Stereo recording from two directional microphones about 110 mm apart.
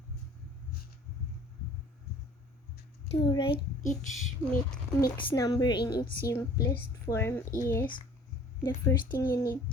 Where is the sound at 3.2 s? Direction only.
50° left (ahead or behind).